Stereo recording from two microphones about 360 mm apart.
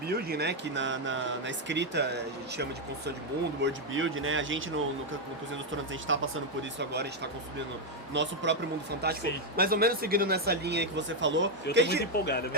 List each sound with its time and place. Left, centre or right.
0.1 s speech: right
5.7 s speech: right
12.1 s speech: left